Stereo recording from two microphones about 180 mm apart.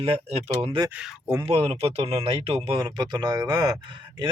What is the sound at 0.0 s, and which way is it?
Speech, 35° right (ahead or behind).